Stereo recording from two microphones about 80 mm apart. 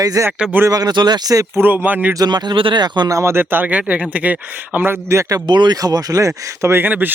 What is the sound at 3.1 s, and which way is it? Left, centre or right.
Speech, right.